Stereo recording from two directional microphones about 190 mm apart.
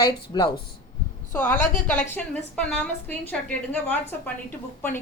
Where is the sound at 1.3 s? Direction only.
10° left (ahead or behind).